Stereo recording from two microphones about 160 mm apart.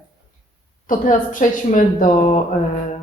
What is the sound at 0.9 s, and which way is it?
A woman's voice, 55° left (ahead or behind).